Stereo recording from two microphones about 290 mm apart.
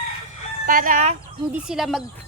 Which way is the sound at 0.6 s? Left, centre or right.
Right.